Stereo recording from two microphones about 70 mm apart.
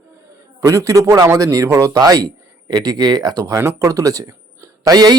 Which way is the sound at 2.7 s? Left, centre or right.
Right.